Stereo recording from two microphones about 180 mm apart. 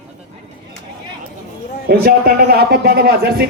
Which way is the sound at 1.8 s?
60° right (ahead or behind).